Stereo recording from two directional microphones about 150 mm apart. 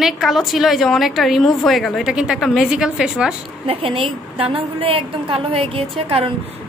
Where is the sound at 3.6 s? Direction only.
35° right (ahead or behind).